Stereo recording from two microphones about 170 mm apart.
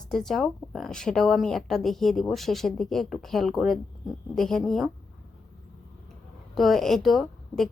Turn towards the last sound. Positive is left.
turn(degrees=0)  # may be behind; listen again after turning